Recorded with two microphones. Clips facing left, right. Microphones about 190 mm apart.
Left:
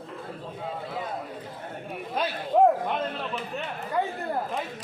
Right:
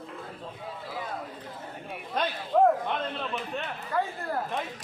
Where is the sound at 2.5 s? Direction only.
20° left (ahead or behind).